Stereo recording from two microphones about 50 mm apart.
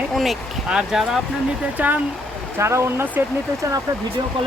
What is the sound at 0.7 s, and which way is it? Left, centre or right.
Speech, centre.